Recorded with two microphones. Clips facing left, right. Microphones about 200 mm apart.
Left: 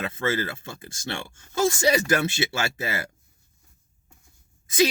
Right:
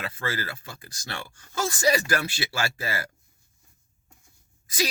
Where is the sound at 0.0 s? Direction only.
25° left (ahead or behind).